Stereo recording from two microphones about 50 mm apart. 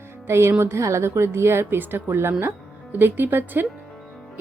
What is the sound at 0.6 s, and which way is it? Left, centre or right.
A woman's voice, right.